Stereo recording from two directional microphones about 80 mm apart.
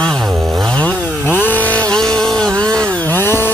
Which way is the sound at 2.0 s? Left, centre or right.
Centre.